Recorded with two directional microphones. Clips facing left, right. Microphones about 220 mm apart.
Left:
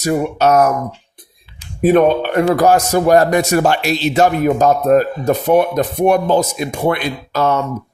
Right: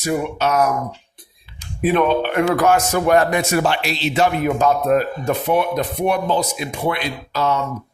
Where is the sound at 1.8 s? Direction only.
45° left (ahead or behind).